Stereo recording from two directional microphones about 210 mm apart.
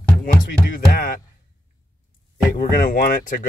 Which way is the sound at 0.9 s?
45° left (ahead or behind).